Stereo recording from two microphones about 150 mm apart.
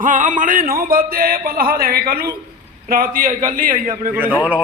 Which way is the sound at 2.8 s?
75° right (ahead or behind).